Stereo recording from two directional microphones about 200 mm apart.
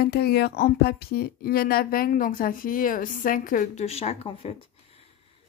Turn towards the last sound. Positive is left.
turn(degrees=30)  # may be behind; listen again after turning